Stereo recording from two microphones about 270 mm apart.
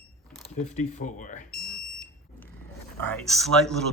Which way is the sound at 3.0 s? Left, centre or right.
Centre.